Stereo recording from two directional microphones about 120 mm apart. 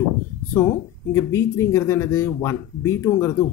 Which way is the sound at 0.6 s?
20° left (ahead or behind).